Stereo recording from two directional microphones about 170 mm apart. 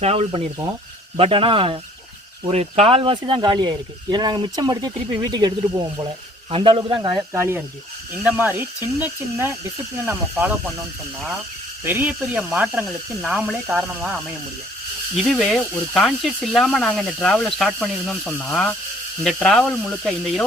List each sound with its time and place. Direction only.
0.0 s speech: 40° right (ahead or behind); by 6.1 s 20° right (ahead or behind)
6.5 s speech: 30° right (ahead or behind)
7.3 s speech: 15° right (ahead or behind)
11.9 s speech: 10° right (ahead or behind)
15.2 s speech: centre (ahead or behind)